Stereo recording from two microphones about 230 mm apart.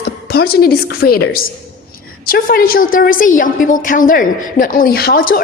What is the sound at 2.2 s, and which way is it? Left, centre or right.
A woman's voice, left.